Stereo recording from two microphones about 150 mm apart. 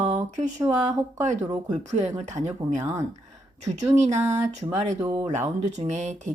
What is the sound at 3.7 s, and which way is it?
Speech, 50° right (ahead or behind).